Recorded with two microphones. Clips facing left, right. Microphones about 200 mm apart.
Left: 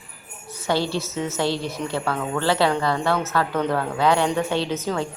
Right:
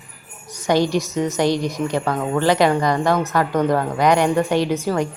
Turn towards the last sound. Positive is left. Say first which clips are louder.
# right 5 dB
turn(degrees=-15)  # may be behind; listen again after turning